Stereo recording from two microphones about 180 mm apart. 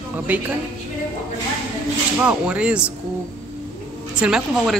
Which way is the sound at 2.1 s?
5° right (ahead or behind).